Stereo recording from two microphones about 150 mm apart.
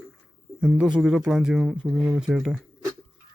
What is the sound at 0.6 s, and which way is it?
A man's voice, 5° right (ahead or behind).